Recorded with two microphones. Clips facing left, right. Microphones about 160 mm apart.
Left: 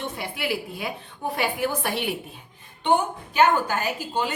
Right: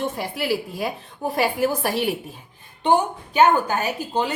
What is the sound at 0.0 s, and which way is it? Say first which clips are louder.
A woman's voice: right 4 dB; 40° right (ahead or behind).